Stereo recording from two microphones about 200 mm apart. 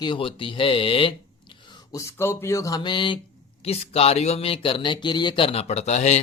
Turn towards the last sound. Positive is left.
turn(degrees=35)  # may be behind; listen again after turning